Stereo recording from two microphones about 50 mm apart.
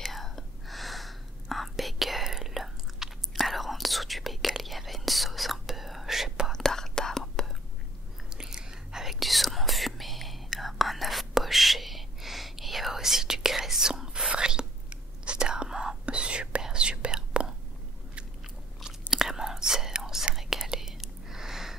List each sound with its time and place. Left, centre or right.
0.0 s whispering: centre
6.5 s whispering: centre
8.3 s whispering: centre
18.9 s whispering: centre